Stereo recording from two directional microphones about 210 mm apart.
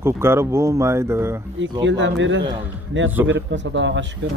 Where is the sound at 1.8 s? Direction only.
60° right (ahead or behind).